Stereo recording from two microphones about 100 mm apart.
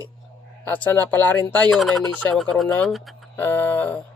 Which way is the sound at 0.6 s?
15° left (ahead or behind).